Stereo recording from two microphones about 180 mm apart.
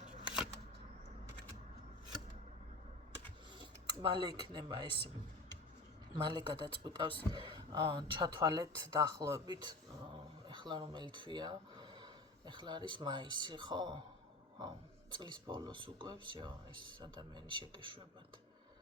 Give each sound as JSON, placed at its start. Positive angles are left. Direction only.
{"t": 3.6, "sound": "speech", "side_deg": -25}
{"t": 6.1, "sound": "speech", "side_deg": -25}
{"t": 15.1, "sound": "speech", "side_deg": -25}